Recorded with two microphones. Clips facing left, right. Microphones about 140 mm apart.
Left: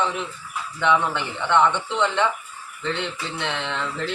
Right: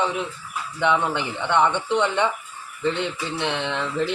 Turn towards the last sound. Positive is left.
turn(degrees=-15)  # may be behind; listen again after turning